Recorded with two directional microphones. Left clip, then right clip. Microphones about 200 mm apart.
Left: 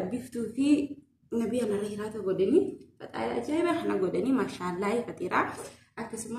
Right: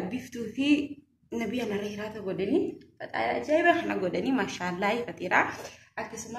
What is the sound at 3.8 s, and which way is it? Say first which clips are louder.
Speech: left 1 dB; 10° right (ahead or behind).